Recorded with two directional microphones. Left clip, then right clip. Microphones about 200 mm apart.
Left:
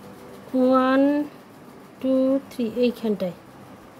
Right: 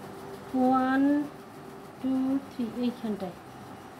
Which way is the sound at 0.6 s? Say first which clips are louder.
Left 7 dB; 60° left (ahead or behind).